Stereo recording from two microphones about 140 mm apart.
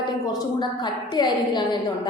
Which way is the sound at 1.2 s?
30° left (ahead or behind).